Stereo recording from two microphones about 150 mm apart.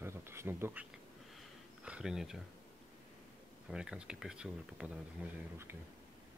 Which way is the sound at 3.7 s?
5° right (ahead or behind).